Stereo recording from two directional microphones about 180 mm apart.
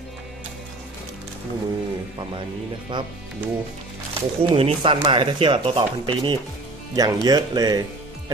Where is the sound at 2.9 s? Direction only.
25° right (ahead or behind).